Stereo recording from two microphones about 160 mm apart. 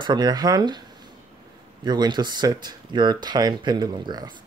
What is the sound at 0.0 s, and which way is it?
Speech, 25° right (ahead or behind).